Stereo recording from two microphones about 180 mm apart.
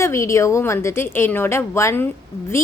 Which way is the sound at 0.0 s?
15° left (ahead or behind).